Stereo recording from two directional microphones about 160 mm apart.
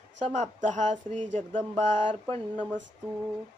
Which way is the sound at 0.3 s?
50° right (ahead or behind).